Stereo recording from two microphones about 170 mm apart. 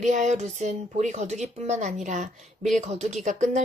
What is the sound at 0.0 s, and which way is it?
Speech, 45° right (ahead or behind).